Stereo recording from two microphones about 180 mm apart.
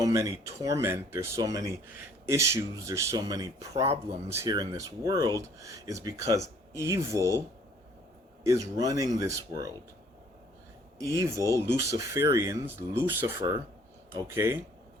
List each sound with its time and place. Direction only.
0.0 s speech: 20° right (ahead or behind)
8.4 s speech: 20° right (ahead or behind)
11.1 s speech: 15° right (ahead or behind)